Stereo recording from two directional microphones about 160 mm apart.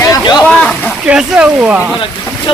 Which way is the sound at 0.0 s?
25° left (ahead or behind).